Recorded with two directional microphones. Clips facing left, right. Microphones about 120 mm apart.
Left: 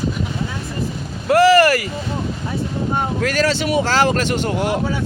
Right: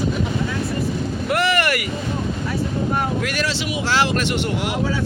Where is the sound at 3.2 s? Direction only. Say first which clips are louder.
Left 5 dB; 40° left (ahead or behind).